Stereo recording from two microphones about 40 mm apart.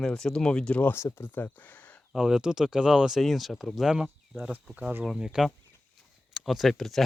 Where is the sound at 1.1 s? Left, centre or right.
Left.